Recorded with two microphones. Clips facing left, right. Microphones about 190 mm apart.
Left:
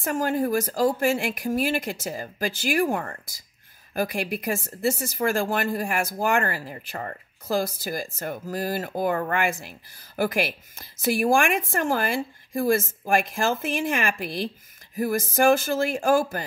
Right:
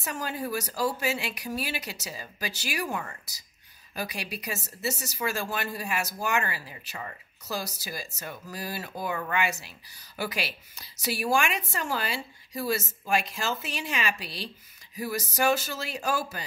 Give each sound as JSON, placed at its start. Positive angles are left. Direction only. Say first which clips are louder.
{"t": 0.0, "sound": "speech", "louder": "left 9 dB", "side_deg": 50}